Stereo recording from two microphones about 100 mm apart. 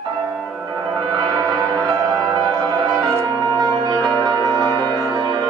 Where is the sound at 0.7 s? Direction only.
40° right (ahead or behind).